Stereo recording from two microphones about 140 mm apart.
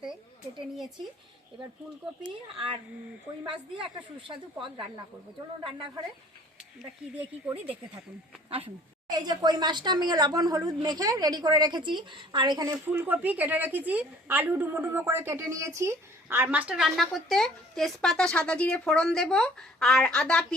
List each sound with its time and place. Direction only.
2.2 s speech: 35° right (ahead or behind)
5.6 s speech: 35° right (ahead or behind)
8.4 s speech: 40° right (ahead or behind)
9.0 s speech: 30° right (ahead or behind)
12.9 s a woman's voice: 10° right (ahead or behind); by 20.6 s 5° left (ahead or behind)